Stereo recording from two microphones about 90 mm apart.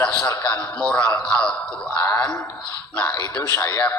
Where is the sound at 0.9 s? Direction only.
15° left (ahead or behind).